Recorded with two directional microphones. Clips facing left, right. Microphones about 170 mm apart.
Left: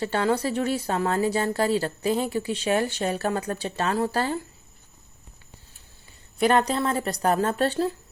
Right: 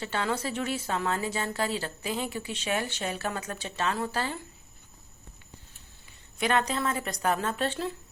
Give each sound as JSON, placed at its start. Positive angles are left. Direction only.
{"t": 0.0, "sound": "a woman's voice", "side_deg": 40}
{"t": 6.4, "sound": "a woman's voice", "side_deg": 35}